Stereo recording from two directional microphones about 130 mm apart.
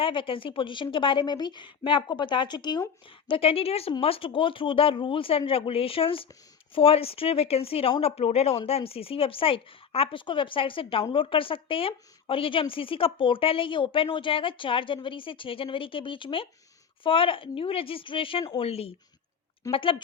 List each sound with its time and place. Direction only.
0.0 s a woman's voice: 40° left (ahead or behind)